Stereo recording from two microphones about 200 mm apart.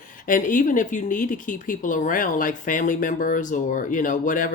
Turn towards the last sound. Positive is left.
turn(degrees=40)  # may be behind; listen again after turning